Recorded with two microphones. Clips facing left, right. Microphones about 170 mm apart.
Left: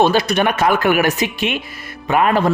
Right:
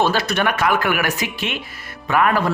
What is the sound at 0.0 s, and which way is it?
A woman's voice, 15° left (ahead or behind).